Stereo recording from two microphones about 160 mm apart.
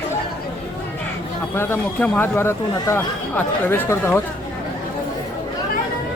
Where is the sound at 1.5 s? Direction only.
15° left (ahead or behind).